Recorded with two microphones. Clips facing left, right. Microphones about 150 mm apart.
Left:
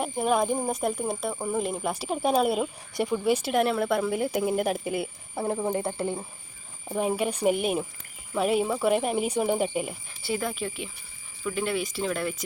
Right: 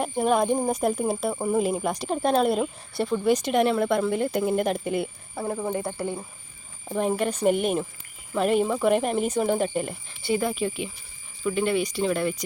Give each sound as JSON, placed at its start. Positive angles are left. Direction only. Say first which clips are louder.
{"t": 0.0, "sound": "speech", "louder": "right 2 dB", "side_deg": 0}
{"t": 5.4, "sound": "speech", "louder": "left 1 dB", "side_deg": 25}
{"t": 6.9, "sound": "speech", "louder": "right 2 dB", "side_deg": 15}